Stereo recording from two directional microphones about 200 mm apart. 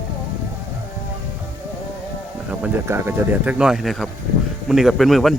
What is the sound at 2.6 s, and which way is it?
Speech, 10° right (ahead or behind).